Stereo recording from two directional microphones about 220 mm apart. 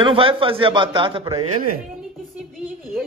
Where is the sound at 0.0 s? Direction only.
25° right (ahead or behind).